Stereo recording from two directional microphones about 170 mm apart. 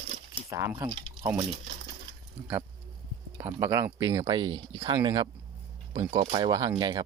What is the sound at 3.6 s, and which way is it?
Speech, 15° right (ahead or behind).